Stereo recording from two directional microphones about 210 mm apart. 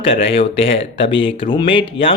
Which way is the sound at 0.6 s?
25° left (ahead or behind).